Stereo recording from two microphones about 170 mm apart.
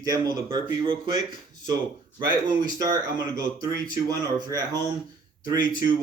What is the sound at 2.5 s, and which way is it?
Speech, 25° right (ahead or behind).